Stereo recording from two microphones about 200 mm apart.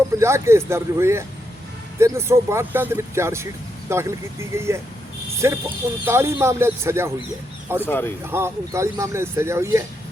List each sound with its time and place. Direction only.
0.2 s speech: 15° right (ahead or behind)
7.9 s speech: 10° left (ahead or behind)
8.3 s speech: 10° right (ahead or behind)